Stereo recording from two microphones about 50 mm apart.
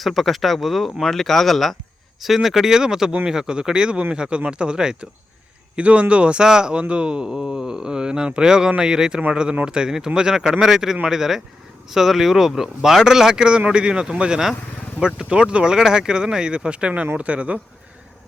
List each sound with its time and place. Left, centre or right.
0.0 s a man's voice: centre; by 17.6 s right